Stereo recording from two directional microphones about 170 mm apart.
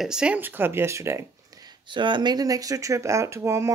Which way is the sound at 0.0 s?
5° right (ahead or behind).